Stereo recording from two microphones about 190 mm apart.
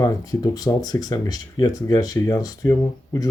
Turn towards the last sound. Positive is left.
turn(degrees=15)  # may be behind; listen again after turning